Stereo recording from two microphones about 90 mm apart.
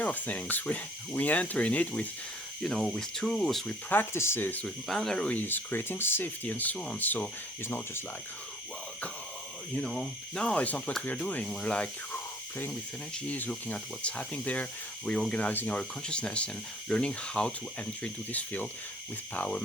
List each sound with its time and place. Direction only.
0.0 s speech: 15° left (ahead or behind)
2.6 s speech: 5° left (ahead or behind)
3.8 s speech: 25° left (ahead or behind)
4.6 s speech: 5° left (ahead or behind)
5.4 s speech: 20° left (ahead or behind)
9.7 s speech: 10° left (ahead or behind)
12.1 s cricket: 25° left (ahead or behind)
13.3 s speech: 20° left (ahead or behind)